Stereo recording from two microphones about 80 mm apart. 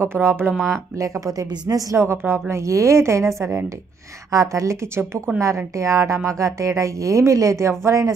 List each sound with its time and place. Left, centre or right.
0.0 s speech: right
1.2 s a woman's voice: right
2.0 s speech: right